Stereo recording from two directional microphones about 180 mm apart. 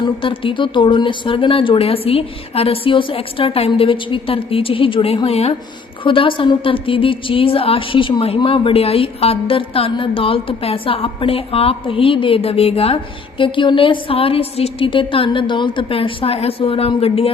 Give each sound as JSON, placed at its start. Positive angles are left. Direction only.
{"t": 0.0, "sound": "a woman's voice", "side_deg": 30}